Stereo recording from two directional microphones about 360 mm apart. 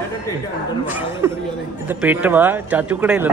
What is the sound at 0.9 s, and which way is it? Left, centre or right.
A man's voice, centre.